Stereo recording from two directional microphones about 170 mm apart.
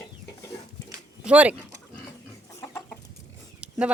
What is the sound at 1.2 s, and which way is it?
Speech, 5° right (ahead or behind).